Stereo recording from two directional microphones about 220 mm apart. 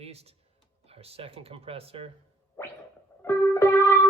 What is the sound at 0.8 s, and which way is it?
Speech, 25° right (ahead or behind).